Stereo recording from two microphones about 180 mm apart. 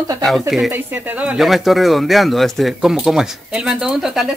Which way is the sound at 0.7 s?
10° right (ahead or behind).